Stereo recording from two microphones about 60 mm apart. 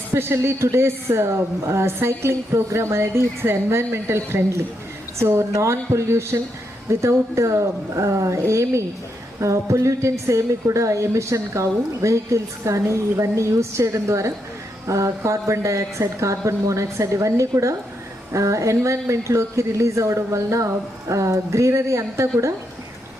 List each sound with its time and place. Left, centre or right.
0.1 s a woman's voice: right